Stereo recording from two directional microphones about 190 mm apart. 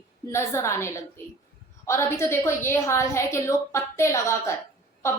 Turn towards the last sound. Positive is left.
turn(degrees=15)  # may be behind; listen again after turning